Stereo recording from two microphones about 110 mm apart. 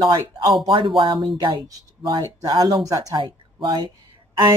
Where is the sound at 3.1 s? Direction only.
45° right (ahead or behind).